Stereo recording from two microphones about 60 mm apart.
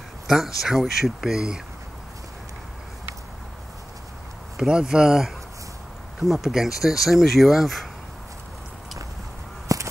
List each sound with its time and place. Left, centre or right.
0.6 s speech: centre
4.6 s speech: centre
9.7 s a sound: right